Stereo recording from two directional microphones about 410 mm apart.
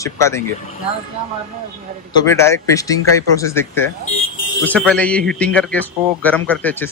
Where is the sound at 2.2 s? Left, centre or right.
Centre.